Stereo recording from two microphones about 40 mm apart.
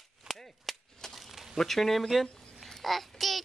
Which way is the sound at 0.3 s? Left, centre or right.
Centre.